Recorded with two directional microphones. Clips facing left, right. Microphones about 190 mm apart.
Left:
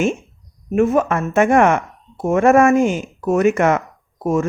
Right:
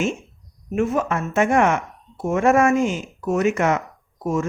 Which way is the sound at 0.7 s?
55° left (ahead or behind).